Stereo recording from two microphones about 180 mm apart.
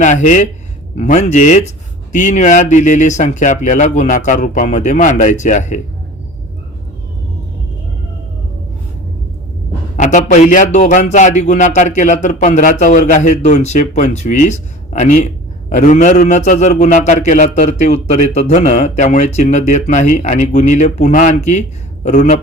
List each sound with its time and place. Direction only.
0.0 s a man's voice: 45° left (ahead or behind)
10.0 s a man's voice: 45° left (ahead or behind)